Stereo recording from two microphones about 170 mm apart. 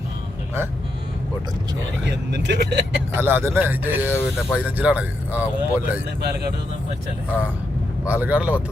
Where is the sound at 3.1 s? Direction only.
15° right (ahead or behind).